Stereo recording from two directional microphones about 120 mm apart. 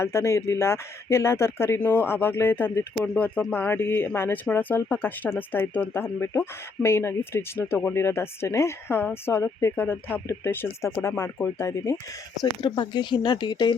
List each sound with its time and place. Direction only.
0.0 s speech: 20° left (ahead or behind)
12.4 s speech: 35° left (ahead or behind)